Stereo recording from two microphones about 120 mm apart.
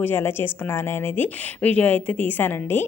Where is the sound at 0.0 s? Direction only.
20° left (ahead or behind).